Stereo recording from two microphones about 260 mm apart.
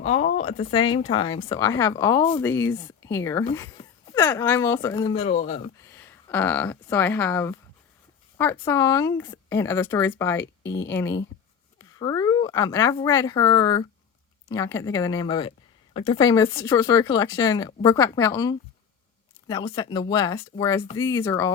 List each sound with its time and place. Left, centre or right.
0.0 s a woman's voice: left
5.9 s a woman's voice: centre